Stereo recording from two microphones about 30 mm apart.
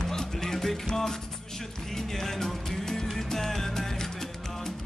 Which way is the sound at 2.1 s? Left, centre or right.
Centre.